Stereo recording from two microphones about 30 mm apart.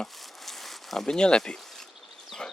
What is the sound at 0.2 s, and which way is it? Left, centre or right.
Zipper, centre.